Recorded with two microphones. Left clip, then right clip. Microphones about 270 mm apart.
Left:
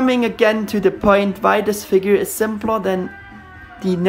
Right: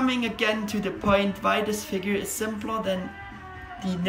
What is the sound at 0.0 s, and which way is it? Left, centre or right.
Speech, centre.